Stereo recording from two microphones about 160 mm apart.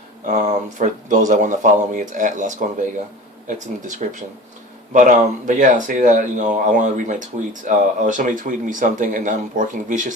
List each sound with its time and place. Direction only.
0.3 s speech: 50° right (ahead or behind)